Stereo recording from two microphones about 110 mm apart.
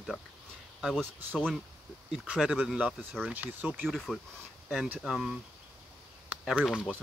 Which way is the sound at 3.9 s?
Centre (ahead or behind).